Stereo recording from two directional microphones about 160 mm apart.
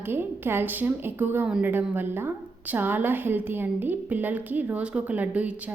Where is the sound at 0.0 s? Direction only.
15° right (ahead or behind).